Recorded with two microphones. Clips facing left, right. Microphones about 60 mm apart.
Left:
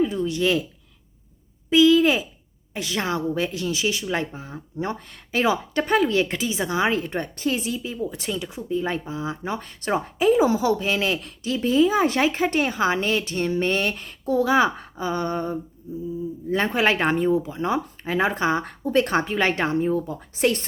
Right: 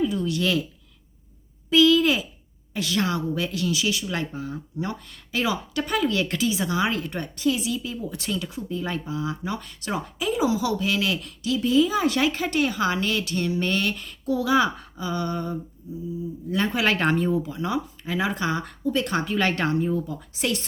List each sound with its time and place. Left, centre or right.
0.0 s speech: left
1.7 s speech: left
7.8 s speech: left
16.9 s speech: centre; by 20.7 s left